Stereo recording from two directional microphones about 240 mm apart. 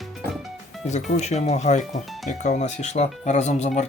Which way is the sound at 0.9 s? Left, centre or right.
Left.